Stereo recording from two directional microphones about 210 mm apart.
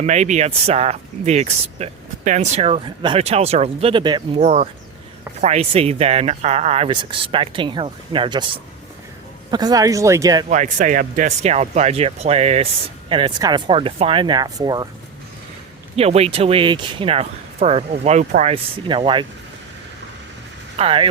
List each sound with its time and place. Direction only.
0.0 s speech: 35° right (ahead or behind)
4.4 s speech: 30° right (ahead or behind)
9.5 s speech: 20° right (ahead or behind)
10.5 s speech: 35° right (ahead or behind); by 14.8 s 20° right (ahead or behind)
16.0 s speech: 30° right (ahead or behind)
20.7 s speech: 25° right (ahead or behind)